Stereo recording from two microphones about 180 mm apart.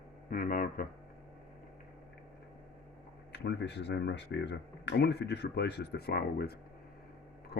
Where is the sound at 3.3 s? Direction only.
65° left (ahead or behind).